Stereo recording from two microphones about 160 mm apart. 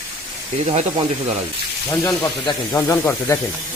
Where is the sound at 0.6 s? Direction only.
40° right (ahead or behind).